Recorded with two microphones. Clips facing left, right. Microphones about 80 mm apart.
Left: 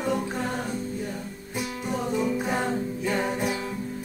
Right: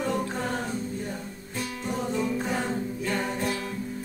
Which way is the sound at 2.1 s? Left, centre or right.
Centre.